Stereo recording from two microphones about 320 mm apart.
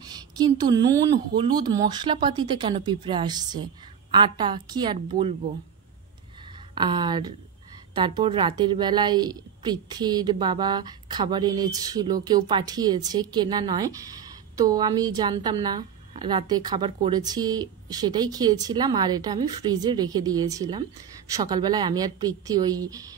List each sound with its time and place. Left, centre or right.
0.0 s a woman's voice: centre
6.7 s a woman's voice: centre